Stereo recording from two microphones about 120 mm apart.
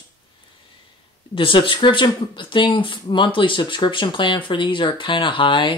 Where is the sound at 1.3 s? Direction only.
45° left (ahead or behind).